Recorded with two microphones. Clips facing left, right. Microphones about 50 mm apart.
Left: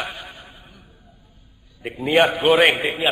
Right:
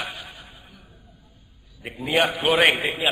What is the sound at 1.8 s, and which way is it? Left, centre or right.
A man's voice, centre.